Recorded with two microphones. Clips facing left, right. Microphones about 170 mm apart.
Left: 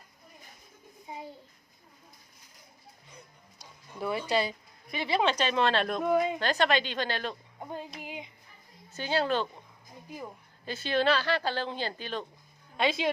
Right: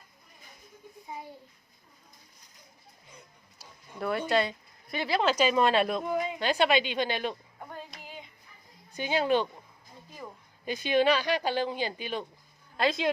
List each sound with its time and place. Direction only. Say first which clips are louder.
3.6 s a sound: right 1 dB; centre (ahead or behind)
5.0 s a woman's voice: right 2 dB; centre (ahead or behind)
7.6 s a sound: left 8 dB; 20° left (ahead or behind)
8.9 s speech: right 2 dB; 15° right (ahead or behind)
10.1 s speech: left 3 dB; 15° left (ahead or behind)
10.7 s speech: right 2 dB; 15° right (ahead or behind)
12.7 s speech: right 1 dB; centre (ahead or behind)